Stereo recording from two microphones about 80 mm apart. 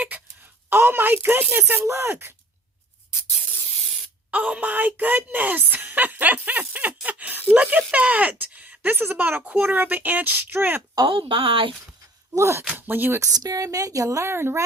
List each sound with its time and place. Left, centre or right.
0.7 s a woman's voice: right
4.3 s a woman's voice: centre
11.0 s speech: right
12.3 s speech: right
12.6 s a woman's voice: right
13.1 s speech: right